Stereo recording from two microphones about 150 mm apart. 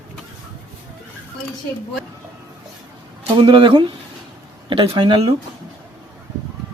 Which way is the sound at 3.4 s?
35° right (ahead or behind).